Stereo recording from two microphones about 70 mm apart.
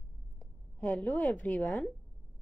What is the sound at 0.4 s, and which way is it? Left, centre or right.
A woman's voice, centre.